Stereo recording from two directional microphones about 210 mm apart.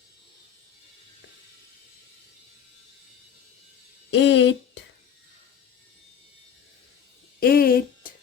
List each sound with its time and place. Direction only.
4.1 s speech: 60° left (ahead or behind)
7.3 s music: 45° left (ahead or behind)